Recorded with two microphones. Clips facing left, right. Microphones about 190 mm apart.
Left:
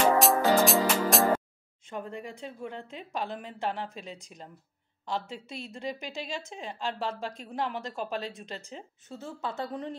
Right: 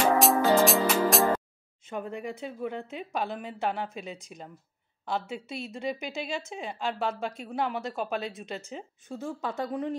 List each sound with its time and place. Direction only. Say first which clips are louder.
0.2 s music: right 1 dB; centre (ahead or behind)
1.9 s a woman's voice: right 3 dB; 10° right (ahead or behind)